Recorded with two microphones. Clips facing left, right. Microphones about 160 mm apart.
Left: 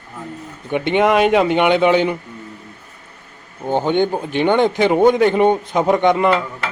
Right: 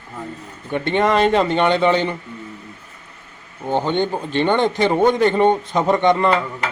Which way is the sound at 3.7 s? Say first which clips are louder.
Left 3 dB; 15° left (ahead or behind).